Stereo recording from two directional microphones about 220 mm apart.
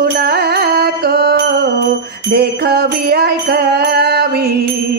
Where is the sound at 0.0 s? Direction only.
45° right (ahead or behind).